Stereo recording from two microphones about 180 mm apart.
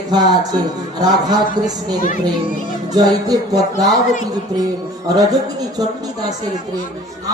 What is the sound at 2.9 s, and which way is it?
A man's voice, 20° right (ahead or behind).